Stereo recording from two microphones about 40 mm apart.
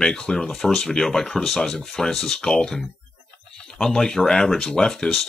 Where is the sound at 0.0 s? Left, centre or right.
Centre.